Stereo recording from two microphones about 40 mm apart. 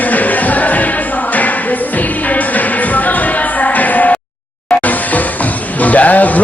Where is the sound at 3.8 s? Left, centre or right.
Left.